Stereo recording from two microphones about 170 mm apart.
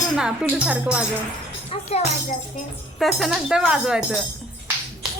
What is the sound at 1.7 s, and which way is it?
Speech, 35° left (ahead or behind).